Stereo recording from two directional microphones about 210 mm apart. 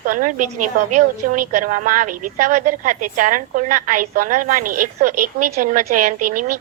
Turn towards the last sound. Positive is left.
turn(degrees=-40)  # may be behind; listen again after turning